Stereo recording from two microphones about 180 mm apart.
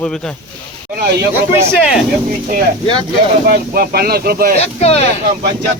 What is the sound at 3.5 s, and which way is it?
Speech, 55° right (ahead or behind).